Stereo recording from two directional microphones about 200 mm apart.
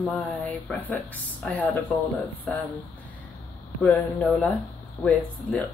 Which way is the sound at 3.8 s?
Centre (ahead or behind).